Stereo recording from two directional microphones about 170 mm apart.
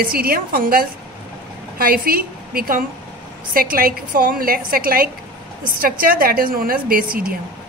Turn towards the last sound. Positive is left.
turn(degrees=-60)  # may be behind; listen again after turning